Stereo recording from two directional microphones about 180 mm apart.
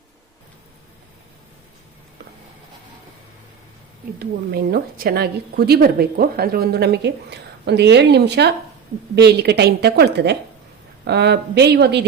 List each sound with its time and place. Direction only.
4.5 s a woman's voice: 55° right (ahead or behind)